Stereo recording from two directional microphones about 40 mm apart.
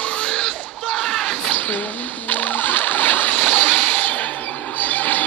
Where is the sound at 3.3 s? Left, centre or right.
Left.